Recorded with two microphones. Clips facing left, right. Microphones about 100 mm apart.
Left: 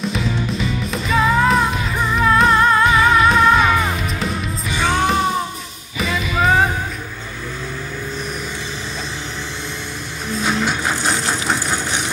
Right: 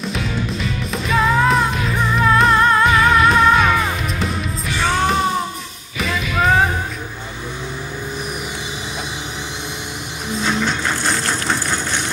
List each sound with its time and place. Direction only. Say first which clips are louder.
0.0 s music: left 1 dB; centre (ahead or behind)
10.6 s music: even; 10° left (ahead or behind)